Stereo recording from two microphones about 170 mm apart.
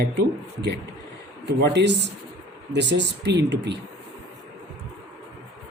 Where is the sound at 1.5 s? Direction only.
85° right.